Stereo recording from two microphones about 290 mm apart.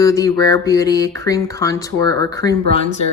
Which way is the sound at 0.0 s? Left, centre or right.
Centre.